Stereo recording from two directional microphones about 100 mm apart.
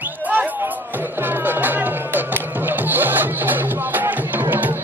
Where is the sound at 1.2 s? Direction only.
20° right (ahead or behind).